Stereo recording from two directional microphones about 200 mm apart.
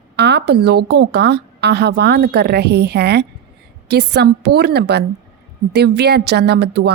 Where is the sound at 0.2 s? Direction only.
55° right (ahead or behind).